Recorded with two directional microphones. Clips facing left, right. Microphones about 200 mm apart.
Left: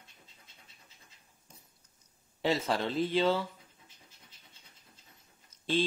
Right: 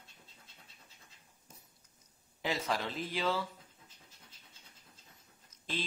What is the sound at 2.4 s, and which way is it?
Speech, 25° left (ahead or behind).